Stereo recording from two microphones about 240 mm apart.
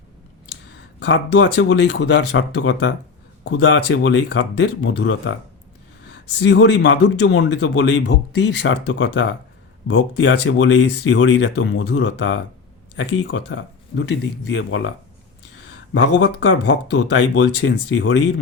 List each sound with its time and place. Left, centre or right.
0.9 s speech: left
6.4 s speech: left
15.9 s speech: left